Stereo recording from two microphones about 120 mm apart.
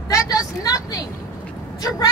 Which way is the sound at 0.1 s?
30° left (ahead or behind).